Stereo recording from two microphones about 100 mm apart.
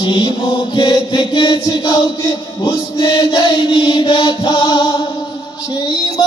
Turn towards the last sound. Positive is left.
turn(degrees=45)  # may be behind; listen again after turning